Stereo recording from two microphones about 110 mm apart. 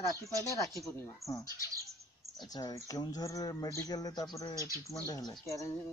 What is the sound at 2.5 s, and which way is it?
Speech, 35° left (ahead or behind).